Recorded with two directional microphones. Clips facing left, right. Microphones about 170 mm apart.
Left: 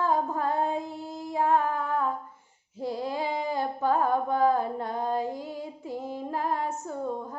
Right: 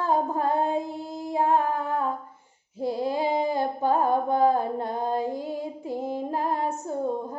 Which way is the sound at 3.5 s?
15° right (ahead or behind).